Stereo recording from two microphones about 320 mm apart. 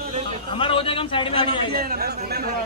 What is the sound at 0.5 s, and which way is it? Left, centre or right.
A man's voice, centre.